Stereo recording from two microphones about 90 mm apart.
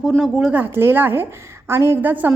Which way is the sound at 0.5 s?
20° right (ahead or behind).